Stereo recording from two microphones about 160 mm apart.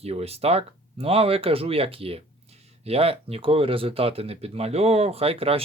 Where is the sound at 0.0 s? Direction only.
40° right (ahead or behind).